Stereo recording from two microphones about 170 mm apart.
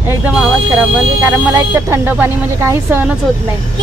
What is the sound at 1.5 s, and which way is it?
Speech, 10° right (ahead or behind).